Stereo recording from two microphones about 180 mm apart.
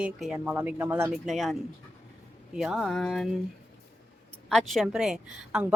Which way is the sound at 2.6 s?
Centre (ahead or behind).